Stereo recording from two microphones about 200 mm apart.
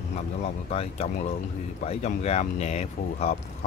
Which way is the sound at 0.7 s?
30° left (ahead or behind).